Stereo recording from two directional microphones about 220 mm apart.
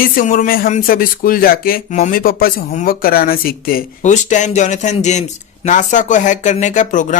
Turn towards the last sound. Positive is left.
turn(degrees=35)  # may be behind; listen again after turning